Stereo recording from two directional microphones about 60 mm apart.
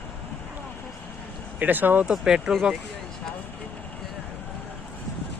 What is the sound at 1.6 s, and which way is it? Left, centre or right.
Speech, right.